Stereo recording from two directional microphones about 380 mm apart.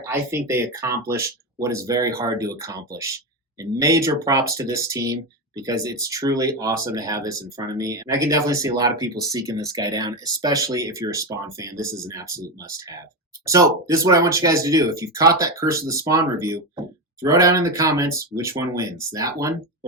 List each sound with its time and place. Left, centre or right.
0.1 s speech: centre
13.4 s speech: centre